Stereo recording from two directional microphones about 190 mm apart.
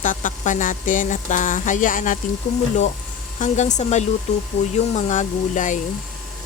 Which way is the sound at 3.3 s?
40° left (ahead or behind).